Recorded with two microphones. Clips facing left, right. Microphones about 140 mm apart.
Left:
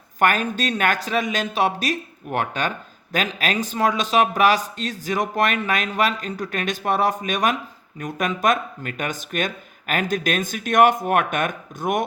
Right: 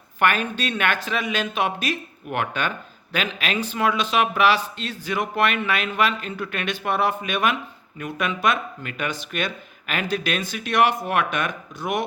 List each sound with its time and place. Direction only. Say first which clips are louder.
0.2 s speech: left 2 dB; 40° left (ahead or behind)